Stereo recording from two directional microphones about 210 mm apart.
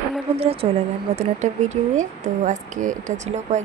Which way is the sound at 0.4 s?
30° right (ahead or behind).